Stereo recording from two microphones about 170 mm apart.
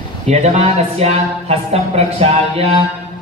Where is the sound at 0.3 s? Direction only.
40° right (ahead or behind).